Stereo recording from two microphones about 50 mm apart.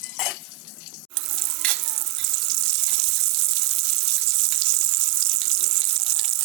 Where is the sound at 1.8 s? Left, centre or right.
Centre.